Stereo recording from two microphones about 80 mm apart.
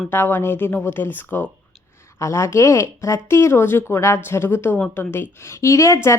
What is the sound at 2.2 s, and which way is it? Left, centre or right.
Speech, left.